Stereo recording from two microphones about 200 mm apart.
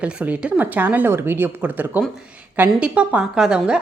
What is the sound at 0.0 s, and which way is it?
Speech, 5° right (ahead or behind).